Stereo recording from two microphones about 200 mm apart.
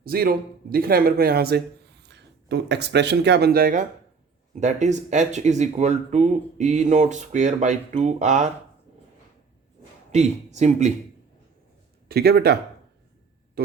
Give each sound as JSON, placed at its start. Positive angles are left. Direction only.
{"t": 0.0, "sound": "speech", "side_deg": -50}
{"t": 10.1, "sound": "speech", "side_deg": -35}
{"t": 12.0, "sound": "speech", "side_deg": -50}